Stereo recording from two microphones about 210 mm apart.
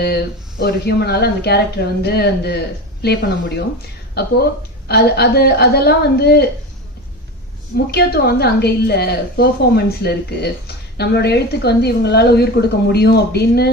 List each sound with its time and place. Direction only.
0.6 s a woman's voice: 50° left (ahead or behind)
7.9 s a woman's voice: 50° left (ahead or behind)